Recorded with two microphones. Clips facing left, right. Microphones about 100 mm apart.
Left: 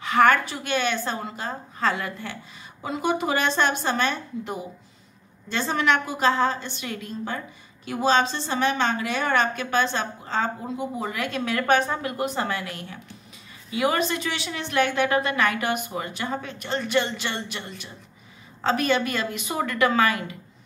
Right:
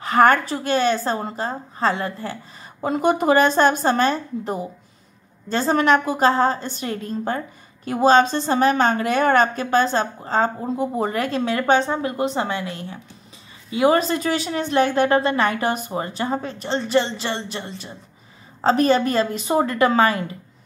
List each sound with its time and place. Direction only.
0.0 s a woman's voice: 40° right (ahead or behind)
2.8 s a woman's voice: 45° right (ahead or behind)